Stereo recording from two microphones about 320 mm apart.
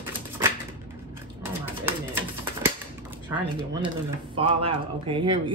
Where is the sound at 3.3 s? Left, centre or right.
Centre.